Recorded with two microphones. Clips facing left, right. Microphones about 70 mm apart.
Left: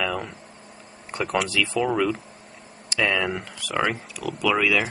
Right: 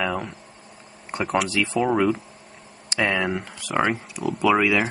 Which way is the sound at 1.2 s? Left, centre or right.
Centre.